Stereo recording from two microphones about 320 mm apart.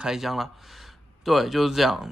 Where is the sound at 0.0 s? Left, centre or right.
Centre.